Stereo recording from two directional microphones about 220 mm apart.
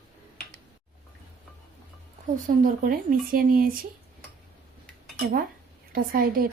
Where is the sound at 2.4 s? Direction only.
35° right (ahead or behind).